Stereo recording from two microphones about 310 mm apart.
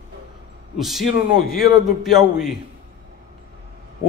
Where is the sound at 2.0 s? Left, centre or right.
Centre.